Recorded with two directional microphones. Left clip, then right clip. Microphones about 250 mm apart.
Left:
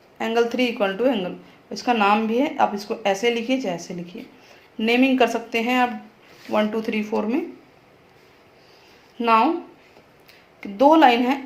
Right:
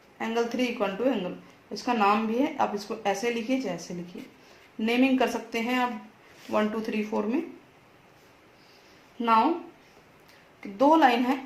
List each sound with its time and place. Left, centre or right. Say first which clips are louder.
0.2 s speech: left 7 dB; left
9.1 s speech: left 5 dB; left
10.6 s speech: left 6 dB; left